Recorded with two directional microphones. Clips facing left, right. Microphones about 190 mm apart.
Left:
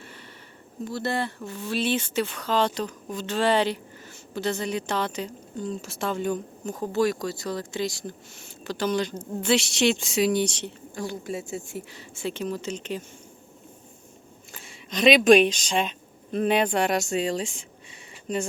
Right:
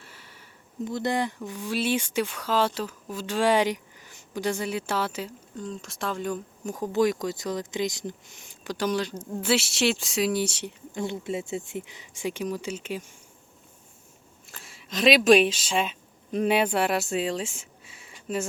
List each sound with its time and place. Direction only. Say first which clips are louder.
0.0 s a sound: left 6 dB; 5° right (ahead or behind)
0.9 s speech: right 1 dB; 15° right (ahead or behind); by 6.4 s centre (ahead or behind)
6.7 s speech: even; 15° right (ahead or behind)
10.9 s speech: right 2 dB; 25° right (ahead or behind)
14.5 s speech: left 1 dB; centre (ahead or behind)